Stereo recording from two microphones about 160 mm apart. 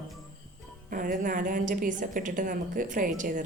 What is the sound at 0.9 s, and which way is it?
A woman's voice, 60° right (ahead or behind).